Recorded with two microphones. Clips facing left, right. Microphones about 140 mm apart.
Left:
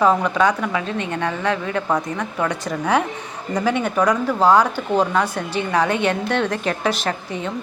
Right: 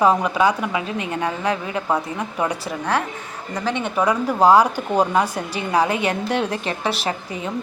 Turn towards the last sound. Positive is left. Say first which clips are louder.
# left 1 dB
turn(degrees=-10)  # may be behind; listen again after turning